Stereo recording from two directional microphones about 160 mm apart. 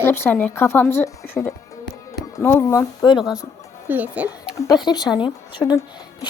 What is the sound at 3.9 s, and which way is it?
Speech, 10° right (ahead or behind).